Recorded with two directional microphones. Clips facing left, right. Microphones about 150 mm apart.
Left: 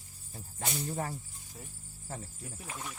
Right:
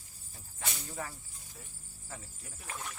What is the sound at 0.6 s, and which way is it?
Speech, 30° left (ahead or behind).